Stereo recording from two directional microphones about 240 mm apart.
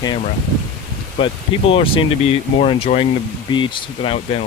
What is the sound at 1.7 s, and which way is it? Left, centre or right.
Speech, left.